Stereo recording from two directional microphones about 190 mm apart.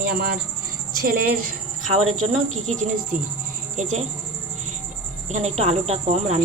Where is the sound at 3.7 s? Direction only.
40° right (ahead or behind).